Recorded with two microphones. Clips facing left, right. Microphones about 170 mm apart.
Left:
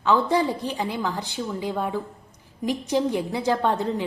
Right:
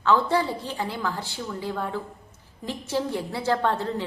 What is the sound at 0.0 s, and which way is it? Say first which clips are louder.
A woman's voice: left 1 dB; 15° left (ahead or behind).